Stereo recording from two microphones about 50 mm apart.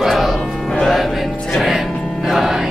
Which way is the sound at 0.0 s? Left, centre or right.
Centre.